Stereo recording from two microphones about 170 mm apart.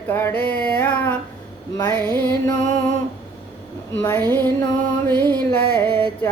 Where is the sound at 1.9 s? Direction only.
25° right (ahead or behind).